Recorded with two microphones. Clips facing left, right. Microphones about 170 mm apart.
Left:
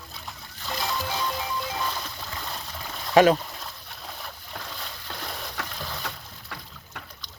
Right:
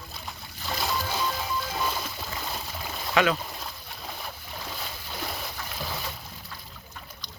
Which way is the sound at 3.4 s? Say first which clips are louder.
Right 1 dB; centre (ahead or behind).